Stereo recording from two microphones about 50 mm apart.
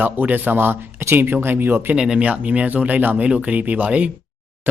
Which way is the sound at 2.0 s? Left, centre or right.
Centre.